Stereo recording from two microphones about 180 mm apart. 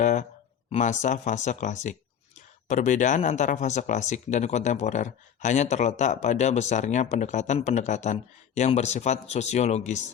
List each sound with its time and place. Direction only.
0.0 s speech: 45° left (ahead or behind)